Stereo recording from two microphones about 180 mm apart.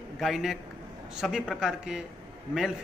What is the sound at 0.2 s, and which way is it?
A man's voice, centre (ahead or behind).